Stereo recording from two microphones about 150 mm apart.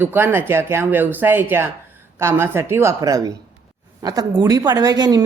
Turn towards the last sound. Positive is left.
turn(degrees=-25)  # may be behind; listen again after turning